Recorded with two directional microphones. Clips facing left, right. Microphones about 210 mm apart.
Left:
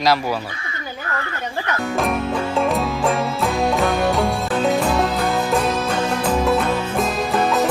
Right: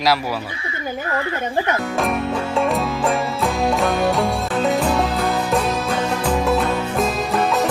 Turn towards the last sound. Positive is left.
turn(degrees=0)  # may be behind; listen again after turning